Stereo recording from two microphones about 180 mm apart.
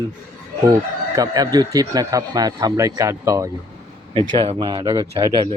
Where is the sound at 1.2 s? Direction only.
20° right (ahead or behind).